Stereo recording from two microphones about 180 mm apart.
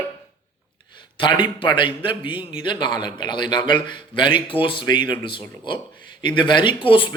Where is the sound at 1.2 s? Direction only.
25° left (ahead or behind).